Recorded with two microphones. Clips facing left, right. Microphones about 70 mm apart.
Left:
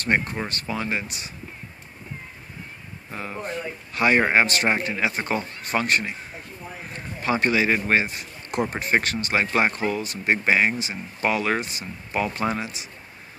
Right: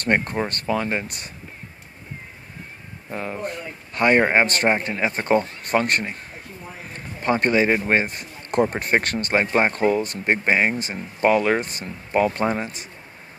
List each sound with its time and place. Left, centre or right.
0.0 s speech: right
3.1 s speech: right
4.2 s speech: right
5.4 s speech: right
7.2 s speech: right